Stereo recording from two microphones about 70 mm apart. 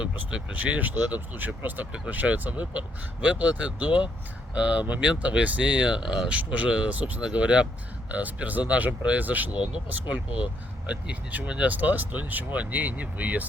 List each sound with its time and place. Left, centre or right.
0.0 s speech: centre